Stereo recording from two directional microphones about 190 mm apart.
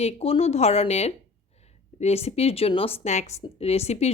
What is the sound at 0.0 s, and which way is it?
A woman's voice, 30° left (ahead or behind).